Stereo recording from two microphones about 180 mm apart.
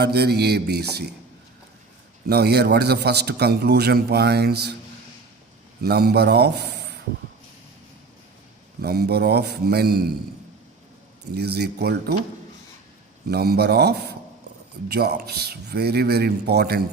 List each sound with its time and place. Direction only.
0.0 s a man's voice: 65° right (ahead or behind)
2.2 s a man's voice: 65° right (ahead or behind)
5.8 s a man's voice: 60° right (ahead or behind)
8.8 s a man's voice: 65° right (ahead or behind)
11.3 s a man's voice: 65° right (ahead or behind)
13.2 s a man's voice: 60° right (ahead or behind)